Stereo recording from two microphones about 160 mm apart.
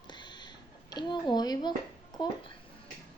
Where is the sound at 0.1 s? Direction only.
30° left (ahead or behind).